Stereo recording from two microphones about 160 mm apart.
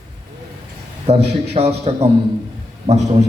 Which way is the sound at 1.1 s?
40° right (ahead or behind).